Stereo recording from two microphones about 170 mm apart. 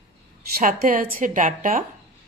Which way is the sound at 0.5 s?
55° right (ahead or behind).